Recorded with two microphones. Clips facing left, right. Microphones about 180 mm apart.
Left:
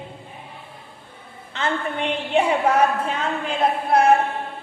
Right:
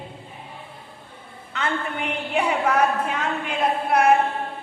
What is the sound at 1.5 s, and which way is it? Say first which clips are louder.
Speech: left 2 dB; 30° left (ahead or behind).